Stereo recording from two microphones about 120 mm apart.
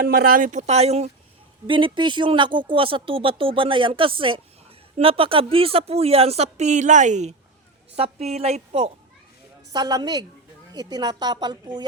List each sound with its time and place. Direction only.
0.4 s speech: 80° right
1.6 s speech: 45° right (ahead or behind); by 7.3 s 80° right
7.9 s a woman's voice: 60° right (ahead or behind)
9.7 s a woman's voice: 35° right (ahead or behind)